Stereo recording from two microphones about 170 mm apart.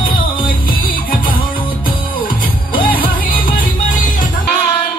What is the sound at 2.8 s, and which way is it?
Music, 55° left (ahead or behind).